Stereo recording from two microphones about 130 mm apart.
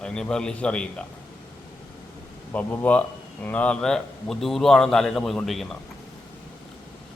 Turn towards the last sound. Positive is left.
turn(degrees=0)  # may be behind; listen again after turning